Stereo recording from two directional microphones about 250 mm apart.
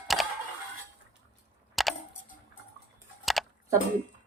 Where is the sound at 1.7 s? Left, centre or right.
Centre.